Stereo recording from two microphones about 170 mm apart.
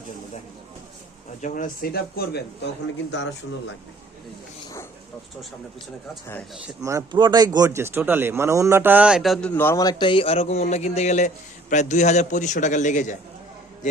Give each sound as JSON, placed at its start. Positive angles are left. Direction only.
{"t": 1.4, "sound": "speech", "side_deg": 50}
{"t": 6.8, "sound": "speech", "side_deg": -20}
{"t": 9.6, "sound": "a man's voice", "side_deg": 15}